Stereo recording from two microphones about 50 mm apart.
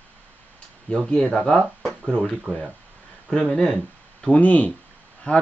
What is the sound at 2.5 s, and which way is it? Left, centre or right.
Speech, right.